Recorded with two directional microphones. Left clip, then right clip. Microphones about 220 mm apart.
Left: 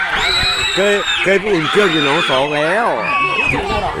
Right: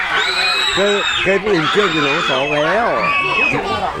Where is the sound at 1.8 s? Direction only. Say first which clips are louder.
Left 2 dB; 25° left (ahead or behind).